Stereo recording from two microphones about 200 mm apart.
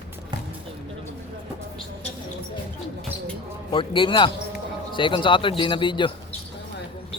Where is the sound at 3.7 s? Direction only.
25° left (ahead or behind).